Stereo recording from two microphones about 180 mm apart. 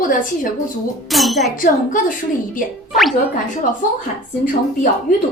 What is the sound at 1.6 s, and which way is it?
Speech, 50° left (ahead or behind).